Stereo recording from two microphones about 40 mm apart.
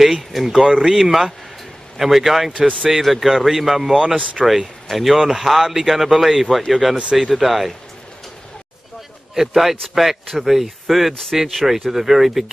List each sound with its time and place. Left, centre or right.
0.0 s speech: centre
4.0 s speech: centre
4.8 s speech: centre
9.3 s a man's voice: centre